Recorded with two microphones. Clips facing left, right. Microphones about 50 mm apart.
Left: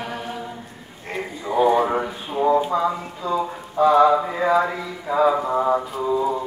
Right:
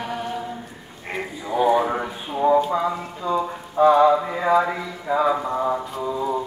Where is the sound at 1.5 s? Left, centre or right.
Centre.